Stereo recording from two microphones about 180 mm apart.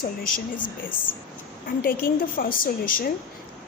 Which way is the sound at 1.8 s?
50° left (ahead or behind).